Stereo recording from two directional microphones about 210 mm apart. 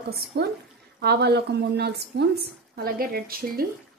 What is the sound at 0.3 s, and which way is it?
A woman's voice, 50° right (ahead or behind).